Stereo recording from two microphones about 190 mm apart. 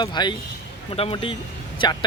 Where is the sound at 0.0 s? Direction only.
25° left (ahead or behind).